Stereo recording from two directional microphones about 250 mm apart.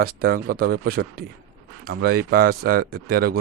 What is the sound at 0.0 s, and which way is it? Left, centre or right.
Speech, right.